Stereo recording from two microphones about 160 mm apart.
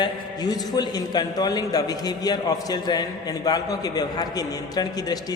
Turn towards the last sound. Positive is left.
turn(degrees=25)  # may be behind; listen again after turning